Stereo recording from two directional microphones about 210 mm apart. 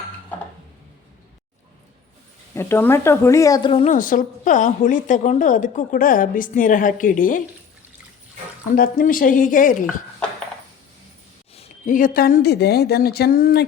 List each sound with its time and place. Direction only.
2.6 s speech: 10° left (ahead or behind); by 3.9 s 25° left (ahead or behind)
3.9 s a woman's voice: 40° left (ahead or behind)
8.7 s a woman's voice: 45° left (ahead or behind)
11.5 s speech: 35° left (ahead or behind)